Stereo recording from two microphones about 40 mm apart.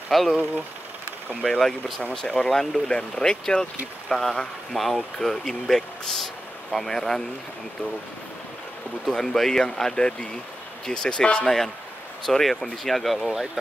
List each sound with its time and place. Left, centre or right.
0.1 s speech: centre
1.6 s speech: centre
2.2 s speech: left
2.5 s speech: centre
2.9 s speech: left
4.1 s speech: centre
9.0 s speech: centre
12.3 s speech: centre
13.2 s speech: centre